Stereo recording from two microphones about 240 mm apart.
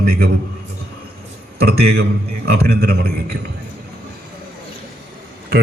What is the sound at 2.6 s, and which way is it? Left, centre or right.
Speech, right.